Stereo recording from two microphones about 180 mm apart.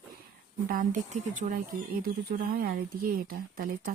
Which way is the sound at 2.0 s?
55° right (ahead or behind).